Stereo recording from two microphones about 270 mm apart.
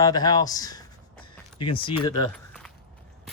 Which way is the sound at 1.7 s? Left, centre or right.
Centre.